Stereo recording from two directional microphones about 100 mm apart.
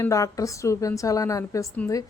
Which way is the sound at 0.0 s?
35° left (ahead or behind).